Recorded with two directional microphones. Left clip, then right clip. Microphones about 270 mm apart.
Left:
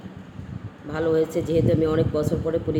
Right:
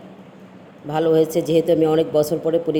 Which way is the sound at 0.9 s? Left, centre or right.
Centre.